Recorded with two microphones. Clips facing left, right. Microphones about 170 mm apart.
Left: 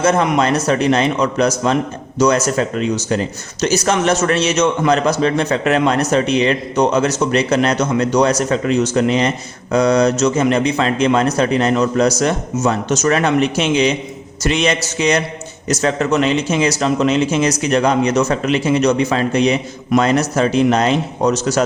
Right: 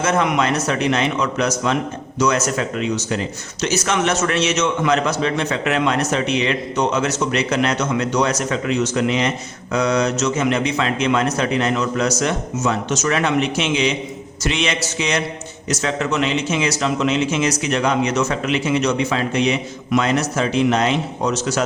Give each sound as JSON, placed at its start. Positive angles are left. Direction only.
{"t": 0.0, "sound": "a man's voice", "side_deg": 35}